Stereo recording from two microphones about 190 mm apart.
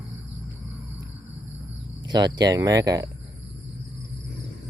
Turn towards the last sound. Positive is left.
turn(degrees=-20)  # may be behind; listen again after turning